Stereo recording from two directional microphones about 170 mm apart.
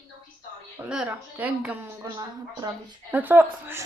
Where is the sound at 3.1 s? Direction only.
10° right (ahead or behind).